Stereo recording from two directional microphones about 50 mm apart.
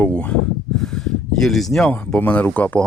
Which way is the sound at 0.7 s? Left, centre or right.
Centre.